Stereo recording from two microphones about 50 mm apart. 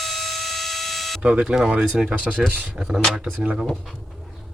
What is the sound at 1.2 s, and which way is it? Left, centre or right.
Speech, right.